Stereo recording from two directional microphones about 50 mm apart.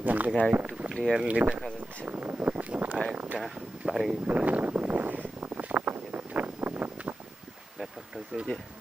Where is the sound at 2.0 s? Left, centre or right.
Right.